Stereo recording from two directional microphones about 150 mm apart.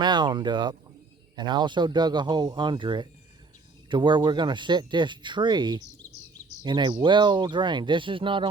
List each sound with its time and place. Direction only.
0.0 s speech: 30° right (ahead or behind)